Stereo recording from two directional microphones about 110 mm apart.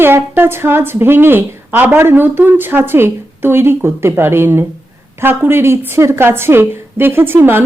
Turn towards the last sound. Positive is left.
turn(degrees=-20)  # may be behind; listen again after turning